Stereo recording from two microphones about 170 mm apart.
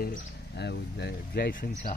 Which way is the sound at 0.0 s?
70° left (ahead or behind).